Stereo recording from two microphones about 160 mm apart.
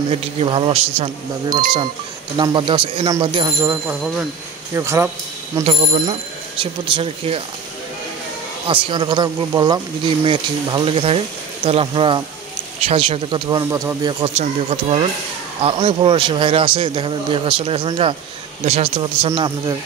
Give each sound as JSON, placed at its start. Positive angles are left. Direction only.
{"t": 0.1, "sound": "speech", "side_deg": -35}
{"t": 1.5, "sound": "speech", "side_deg": -25}
{"t": 4.7, "sound": "speech", "side_deg": -15}
{"t": 6.6, "sound": "speech", "side_deg": -35}
{"t": 8.6, "sound": "speech", "side_deg": -30}
{"t": 14.2, "sound": "speech", "side_deg": -40}